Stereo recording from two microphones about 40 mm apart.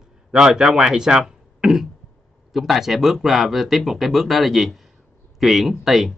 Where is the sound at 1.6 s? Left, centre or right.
Centre.